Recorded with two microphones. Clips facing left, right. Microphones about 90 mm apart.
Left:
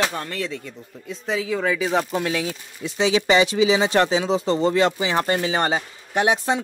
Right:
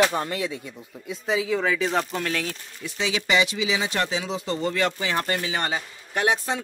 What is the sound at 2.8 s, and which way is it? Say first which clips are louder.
Speech: left 8 dB; 30° left (ahead or behind).